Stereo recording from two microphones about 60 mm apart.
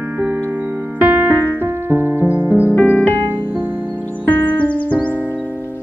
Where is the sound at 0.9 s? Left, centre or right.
Right.